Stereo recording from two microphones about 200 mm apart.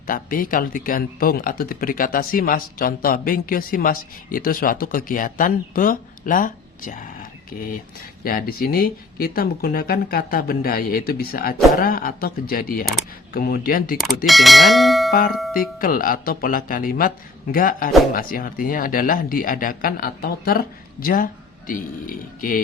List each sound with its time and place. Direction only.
0.1 s speech: 45° left (ahead or behind)
14.3 s speech: centre (ahead or behind)
15.8 s speech: 45° left (ahead or behind)